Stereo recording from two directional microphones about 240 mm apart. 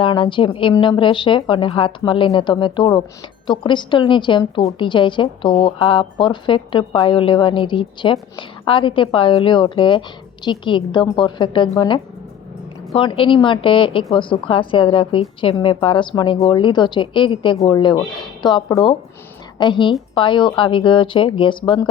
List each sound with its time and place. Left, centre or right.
0.0 s a woman's voice: left